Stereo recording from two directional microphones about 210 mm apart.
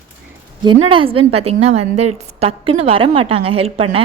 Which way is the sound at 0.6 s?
25° right (ahead or behind).